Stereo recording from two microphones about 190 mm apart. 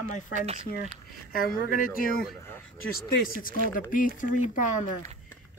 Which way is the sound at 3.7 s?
45° left (ahead or behind).